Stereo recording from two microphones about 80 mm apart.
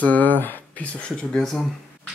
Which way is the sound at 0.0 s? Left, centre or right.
Left.